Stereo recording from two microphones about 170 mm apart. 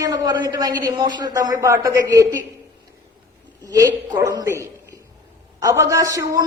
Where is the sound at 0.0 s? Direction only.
20° right (ahead or behind).